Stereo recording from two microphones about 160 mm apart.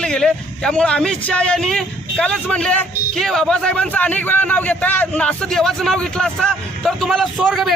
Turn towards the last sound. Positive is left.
turn(degrees=0)  # may be behind; listen again after turning